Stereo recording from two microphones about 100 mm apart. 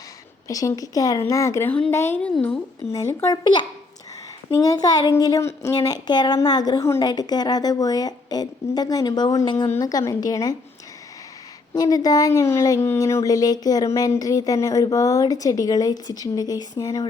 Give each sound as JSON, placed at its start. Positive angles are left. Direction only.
{"t": 0.4, "sound": "a woman's voice", "side_deg": 35}
{"t": 3.2, "sound": "speech", "side_deg": 50}
{"t": 4.4, "sound": "speech", "side_deg": 30}
{"t": 11.7, "sound": "speech", "side_deg": 40}